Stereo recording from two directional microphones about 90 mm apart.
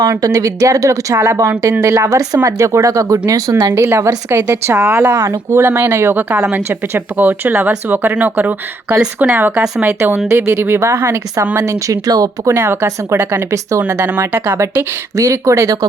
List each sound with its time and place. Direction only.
0.0 s speech: 45° right (ahead or behind)
14.1 s speech: 25° right (ahead or behind)
15.1 s speech: 35° right (ahead or behind)